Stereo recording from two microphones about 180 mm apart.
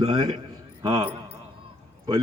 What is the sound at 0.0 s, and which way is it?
A man's voice, 25° right (ahead or behind).